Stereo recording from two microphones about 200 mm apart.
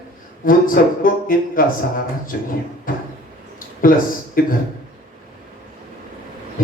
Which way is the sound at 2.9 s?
45° left (ahead or behind).